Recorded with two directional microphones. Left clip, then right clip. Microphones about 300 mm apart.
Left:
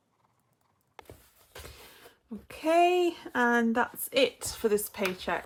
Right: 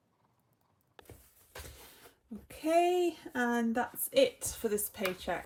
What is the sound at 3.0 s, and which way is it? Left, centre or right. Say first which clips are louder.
Speech: left 6 dB; centre.